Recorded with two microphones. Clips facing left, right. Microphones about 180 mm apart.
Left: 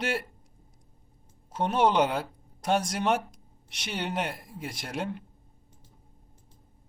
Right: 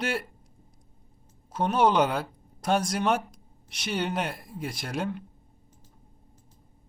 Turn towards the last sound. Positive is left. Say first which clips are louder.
# right 2 dB
turn(degrees=20)  # may be behind; listen again after turning